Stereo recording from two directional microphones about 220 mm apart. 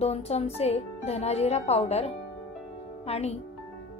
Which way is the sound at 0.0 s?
30° left (ahead or behind).